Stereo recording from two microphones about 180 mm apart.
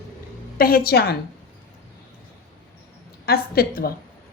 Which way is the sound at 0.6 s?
55° left (ahead or behind).